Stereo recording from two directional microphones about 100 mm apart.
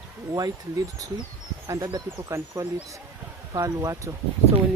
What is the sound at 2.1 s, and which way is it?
Speech, 25° right (ahead or behind).